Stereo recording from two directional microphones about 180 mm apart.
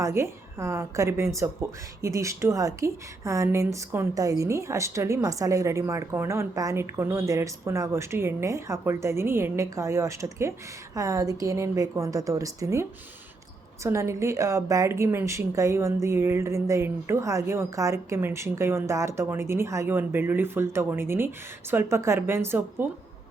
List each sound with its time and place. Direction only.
0.0 s a woman's voice: 15° right (ahead or behind)
13.8 s a woman's voice: 15° right (ahead or behind)